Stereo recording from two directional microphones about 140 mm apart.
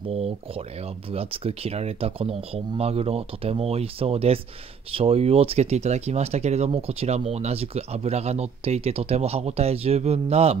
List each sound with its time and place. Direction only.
0.1 s speech: 45° right (ahead or behind)